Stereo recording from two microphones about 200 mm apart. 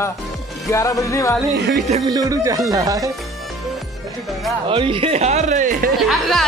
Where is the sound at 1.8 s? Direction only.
30° right (ahead or behind).